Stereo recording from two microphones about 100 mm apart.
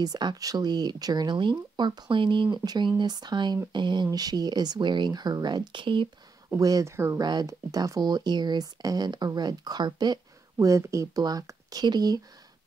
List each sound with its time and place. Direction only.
0.0 s speech: 45° right (ahead or behind)
6.6 s speech: 40° right (ahead or behind)